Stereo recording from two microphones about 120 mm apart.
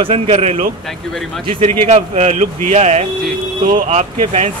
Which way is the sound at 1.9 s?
70° right (ahead or behind).